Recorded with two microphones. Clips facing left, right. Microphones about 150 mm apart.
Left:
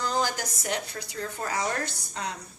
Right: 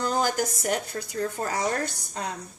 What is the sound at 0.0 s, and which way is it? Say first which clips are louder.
Speech: right 3 dB; 50° right (ahead or behind).